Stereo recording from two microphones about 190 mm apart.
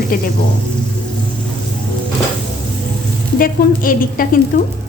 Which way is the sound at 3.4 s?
50° left (ahead or behind).